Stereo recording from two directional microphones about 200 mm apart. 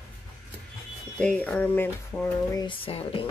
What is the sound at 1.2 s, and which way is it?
Speech, 5° left (ahead or behind).